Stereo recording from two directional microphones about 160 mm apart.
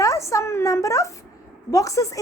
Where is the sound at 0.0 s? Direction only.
20° left (ahead or behind).